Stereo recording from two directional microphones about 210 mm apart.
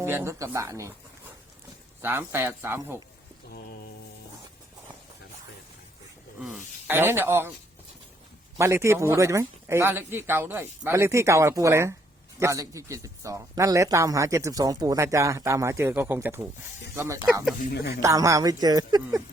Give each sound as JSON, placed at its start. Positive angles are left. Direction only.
{"t": 0.0, "sound": "a man's voice", "side_deg": -10}
{"t": 2.0, "sound": "a man's voice", "side_deg": -10}
{"t": 6.4, "sound": "a man's voice", "side_deg": -5}
{"t": 8.5, "sound": "a man's voice", "side_deg": -15}
{"t": 17.6, "sound": "speech", "side_deg": 50}
{"t": 18.0, "sound": "a man's voice", "side_deg": -15}